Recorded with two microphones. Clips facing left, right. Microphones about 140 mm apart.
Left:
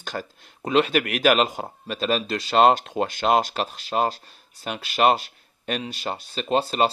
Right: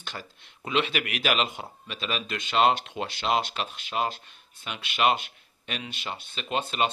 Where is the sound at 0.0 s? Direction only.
45° left (ahead or behind).